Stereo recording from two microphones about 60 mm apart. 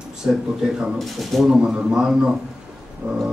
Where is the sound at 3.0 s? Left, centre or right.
Centre.